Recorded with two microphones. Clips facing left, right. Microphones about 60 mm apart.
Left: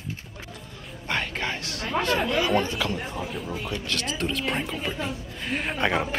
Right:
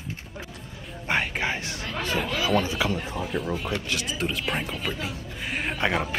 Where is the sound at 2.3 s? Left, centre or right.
Centre.